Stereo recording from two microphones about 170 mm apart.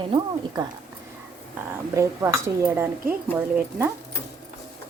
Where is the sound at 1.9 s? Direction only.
20° right (ahead or behind).